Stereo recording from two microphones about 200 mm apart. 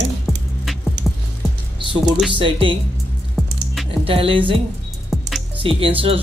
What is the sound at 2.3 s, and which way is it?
Speech, 25° right (ahead or behind).